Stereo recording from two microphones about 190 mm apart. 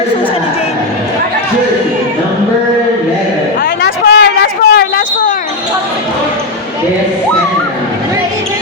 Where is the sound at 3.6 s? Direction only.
60° left (ahead or behind).